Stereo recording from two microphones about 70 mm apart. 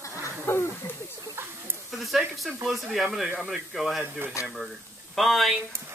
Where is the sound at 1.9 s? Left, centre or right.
Centre.